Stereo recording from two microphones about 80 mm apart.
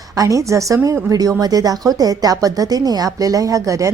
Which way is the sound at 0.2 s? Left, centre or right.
Right.